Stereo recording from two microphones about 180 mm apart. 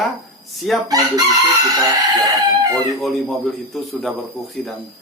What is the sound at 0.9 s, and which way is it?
Chicken, 20° right (ahead or behind).